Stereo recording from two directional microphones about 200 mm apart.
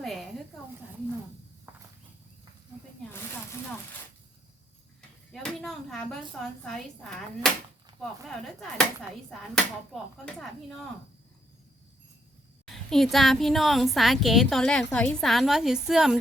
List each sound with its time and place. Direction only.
0.0 s a sound: centre (ahead or behind)
5.3 s a sound: centre (ahead or behind)
6.4 s speech: 5° left (ahead or behind)
7.9 s clip-clop: 25° right (ahead or behind)
9.9 s speech: centre (ahead or behind)
12.6 s speech: centre (ahead or behind)